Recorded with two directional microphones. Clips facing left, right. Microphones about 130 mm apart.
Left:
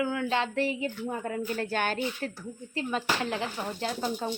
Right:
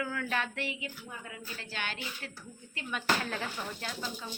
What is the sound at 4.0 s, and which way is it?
Speech, 55° left (ahead or behind).